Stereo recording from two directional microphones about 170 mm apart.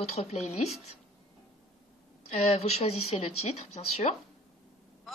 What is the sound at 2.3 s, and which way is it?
A woman's voice, 40° left (ahead or behind).